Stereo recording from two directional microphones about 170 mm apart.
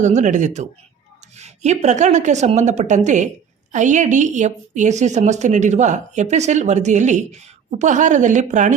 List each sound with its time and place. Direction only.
0.0 s a woman's voice: 45° right (ahead or behind)